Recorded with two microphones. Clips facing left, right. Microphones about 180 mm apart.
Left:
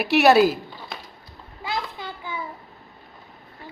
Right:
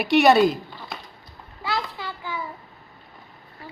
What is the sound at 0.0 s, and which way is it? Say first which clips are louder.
Speech: even; centre (ahead or behind).